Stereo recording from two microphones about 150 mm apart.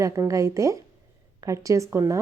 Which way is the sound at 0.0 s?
20° right (ahead or behind).